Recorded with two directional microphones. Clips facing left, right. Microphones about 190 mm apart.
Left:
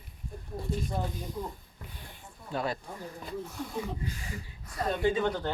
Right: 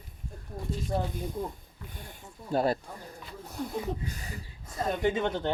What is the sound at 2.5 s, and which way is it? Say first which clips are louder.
Speech: right 6 dB; 40° right (ahead or behind).